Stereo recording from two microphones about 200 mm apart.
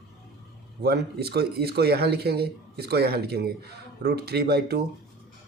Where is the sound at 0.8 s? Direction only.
55° right (ahead or behind).